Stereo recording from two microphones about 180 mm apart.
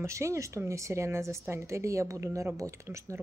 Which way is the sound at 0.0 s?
15° right (ahead or behind).